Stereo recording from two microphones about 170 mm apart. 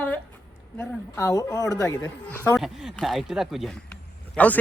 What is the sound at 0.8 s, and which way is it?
Speech, 15° left (ahead or behind).